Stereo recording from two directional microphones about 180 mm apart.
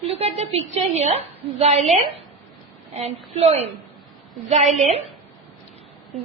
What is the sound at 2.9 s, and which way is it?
Speech, 35° right (ahead or behind).